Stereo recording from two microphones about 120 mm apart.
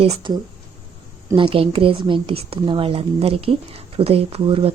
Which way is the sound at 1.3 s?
50° right (ahead or behind).